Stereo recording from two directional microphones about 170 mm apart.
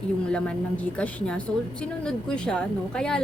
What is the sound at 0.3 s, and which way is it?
A woman's voice, 5° left (ahead or behind).